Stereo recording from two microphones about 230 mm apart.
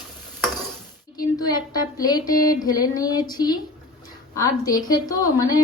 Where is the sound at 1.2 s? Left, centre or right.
Centre.